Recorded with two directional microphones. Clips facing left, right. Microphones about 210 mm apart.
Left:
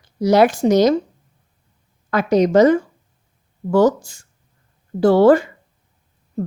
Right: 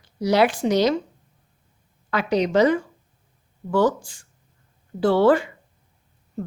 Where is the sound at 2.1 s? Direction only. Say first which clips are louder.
Left 6 dB; 45° left (ahead or behind).